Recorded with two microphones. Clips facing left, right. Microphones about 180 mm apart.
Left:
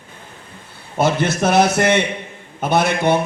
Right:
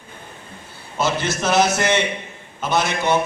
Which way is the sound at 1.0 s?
55° left (ahead or behind).